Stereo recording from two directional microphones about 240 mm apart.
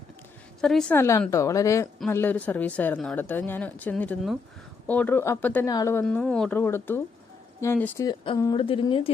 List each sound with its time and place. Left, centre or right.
0.6 s speech: centre; by 9.0 s left